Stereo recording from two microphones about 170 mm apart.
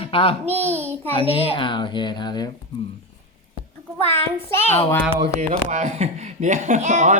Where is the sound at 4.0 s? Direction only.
35° right (ahead or behind).